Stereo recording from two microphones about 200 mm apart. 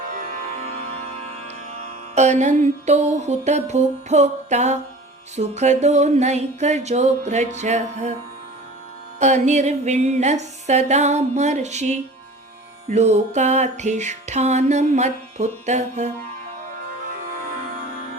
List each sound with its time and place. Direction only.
0.1 s music: 35° right (ahead or behind)
2.1 s music: 35° right (ahead or behind)
9.1 s music: 35° right (ahead or behind)